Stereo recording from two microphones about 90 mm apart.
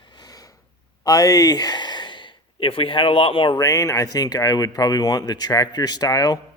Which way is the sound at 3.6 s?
35° left (ahead or behind).